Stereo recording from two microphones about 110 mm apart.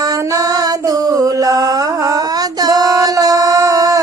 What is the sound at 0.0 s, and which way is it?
Mantra, 30° right (ahead or behind).